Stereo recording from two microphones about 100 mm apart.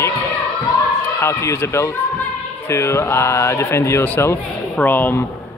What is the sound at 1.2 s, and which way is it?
A man's voice, 30° left (ahead or behind).